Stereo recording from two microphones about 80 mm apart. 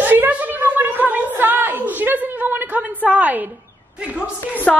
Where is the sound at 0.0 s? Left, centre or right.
Right.